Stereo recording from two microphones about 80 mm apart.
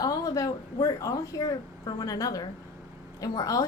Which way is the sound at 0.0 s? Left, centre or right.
Left.